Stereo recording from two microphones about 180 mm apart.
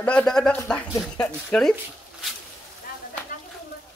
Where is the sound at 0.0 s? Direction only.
5° left (ahead or behind).